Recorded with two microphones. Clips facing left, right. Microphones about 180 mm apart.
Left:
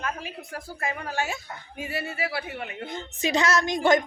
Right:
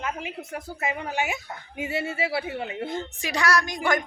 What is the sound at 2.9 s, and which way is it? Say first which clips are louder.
A woman's voice: left 3 dB; 20° left (ahead or behind).